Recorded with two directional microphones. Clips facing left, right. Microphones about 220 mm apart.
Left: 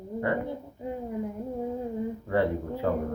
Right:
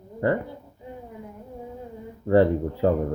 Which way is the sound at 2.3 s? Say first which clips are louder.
Right 9 dB; 35° right (ahead or behind).